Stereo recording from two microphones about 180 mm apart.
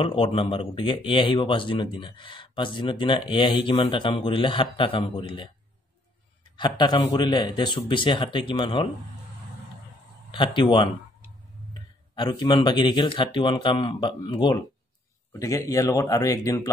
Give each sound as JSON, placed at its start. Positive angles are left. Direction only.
{"t": 0.0, "sound": "speech", "side_deg": 30}
{"t": 6.5, "sound": "speech", "side_deg": 25}
{"t": 10.3, "sound": "speech", "side_deg": 30}
{"t": 12.2, "sound": "speech", "side_deg": 25}